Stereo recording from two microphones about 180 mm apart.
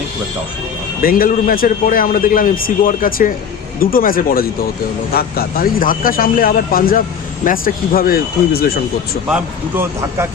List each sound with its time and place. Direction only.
1.0 s a man's voice: 55° left (ahead or behind)
9.3 s speech: 10° right (ahead or behind)